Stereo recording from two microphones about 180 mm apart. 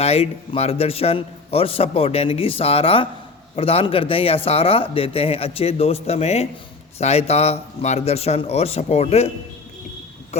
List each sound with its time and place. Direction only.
0.0 s a man's voice: 35° left (ahead or behind)